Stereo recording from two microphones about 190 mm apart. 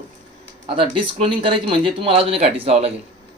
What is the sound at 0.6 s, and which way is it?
Speech, 25° right (ahead or behind).